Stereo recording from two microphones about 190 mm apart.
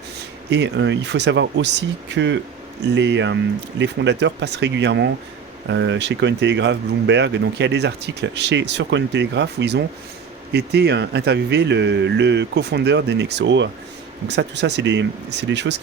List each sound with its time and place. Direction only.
0.5 s speech: 65° right (ahead or behind)